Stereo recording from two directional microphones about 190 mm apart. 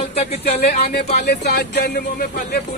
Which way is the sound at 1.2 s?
60° left (ahead or behind).